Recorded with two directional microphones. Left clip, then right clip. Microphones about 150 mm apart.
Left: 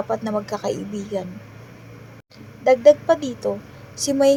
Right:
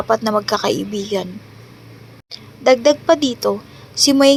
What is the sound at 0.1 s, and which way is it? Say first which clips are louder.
A woman's voice: right 8 dB; 25° right (ahead or behind).